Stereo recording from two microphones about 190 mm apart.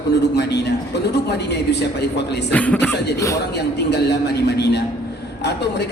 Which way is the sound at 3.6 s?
60° left (ahead or behind).